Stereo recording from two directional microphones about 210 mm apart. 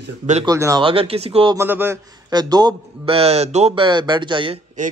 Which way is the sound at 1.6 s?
10° right (ahead or behind).